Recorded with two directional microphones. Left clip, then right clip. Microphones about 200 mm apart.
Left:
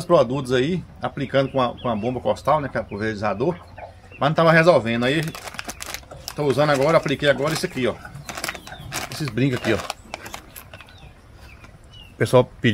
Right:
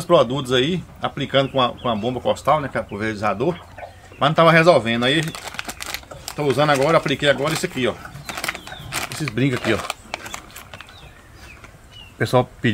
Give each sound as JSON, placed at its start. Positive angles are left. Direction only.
{"t": 0.0, "sound": "a man's voice", "side_deg": -5}
{"t": 4.2, "sound": "crumpling", "side_deg": -5}
{"t": 12.2, "sound": "speech", "side_deg": 30}